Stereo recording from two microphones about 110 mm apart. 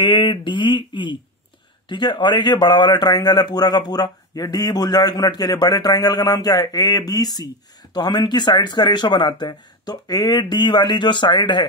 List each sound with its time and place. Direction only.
0.0 s a man's voice: 45° left (ahead or behind)